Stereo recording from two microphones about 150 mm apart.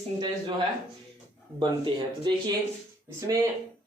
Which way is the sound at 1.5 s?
30° right (ahead or behind).